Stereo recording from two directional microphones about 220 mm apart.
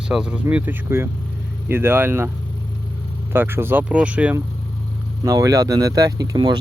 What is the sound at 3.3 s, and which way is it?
Speech, 10° right (ahead or behind).